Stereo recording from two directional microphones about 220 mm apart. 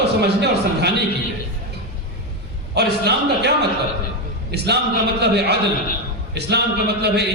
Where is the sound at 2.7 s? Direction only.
50° right (ahead or behind).